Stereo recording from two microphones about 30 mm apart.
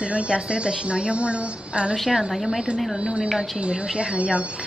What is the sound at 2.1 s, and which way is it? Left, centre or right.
Speech, centre.